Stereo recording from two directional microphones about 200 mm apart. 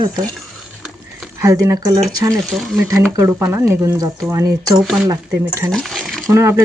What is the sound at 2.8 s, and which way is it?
Speech, 15° right (ahead or behind).